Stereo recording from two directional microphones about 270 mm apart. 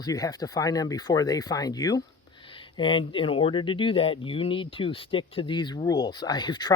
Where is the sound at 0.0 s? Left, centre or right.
Centre.